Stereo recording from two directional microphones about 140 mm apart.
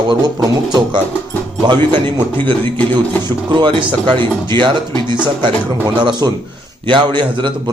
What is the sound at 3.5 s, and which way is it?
A man's voice, 35° right (ahead or behind).